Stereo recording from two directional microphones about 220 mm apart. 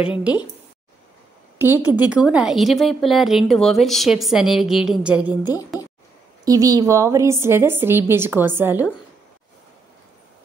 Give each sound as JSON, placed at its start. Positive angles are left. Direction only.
{"t": 1.6, "sound": "a woman's voice", "side_deg": -10}
{"t": 5.3, "sound": "a woman's voice", "side_deg": 15}
{"t": 6.4, "sound": "a woman's voice", "side_deg": -15}